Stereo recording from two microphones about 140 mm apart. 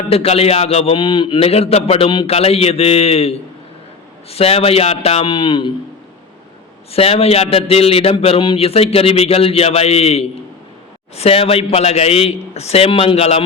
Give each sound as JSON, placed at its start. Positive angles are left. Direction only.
{"t": 0.1, "sound": "a man's voice", "side_deg": 45}
{"t": 6.9, "sound": "a man's voice", "side_deg": 45}